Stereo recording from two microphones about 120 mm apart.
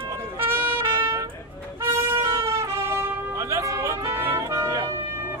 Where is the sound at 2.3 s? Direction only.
25° right (ahead or behind).